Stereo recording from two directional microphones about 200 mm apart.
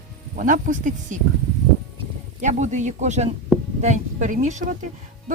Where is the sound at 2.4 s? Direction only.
35° right (ahead or behind).